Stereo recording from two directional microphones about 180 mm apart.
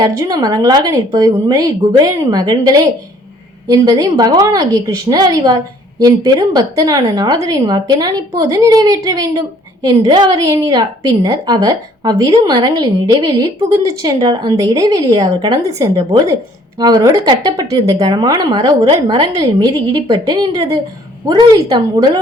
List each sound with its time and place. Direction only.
0.0 s a woman's voice: 20° right (ahead or behind)